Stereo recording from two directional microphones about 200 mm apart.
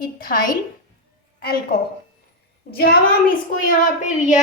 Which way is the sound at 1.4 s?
50° left (ahead or behind).